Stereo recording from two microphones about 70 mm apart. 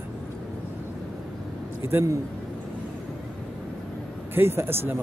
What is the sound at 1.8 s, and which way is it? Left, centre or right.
Speech, right.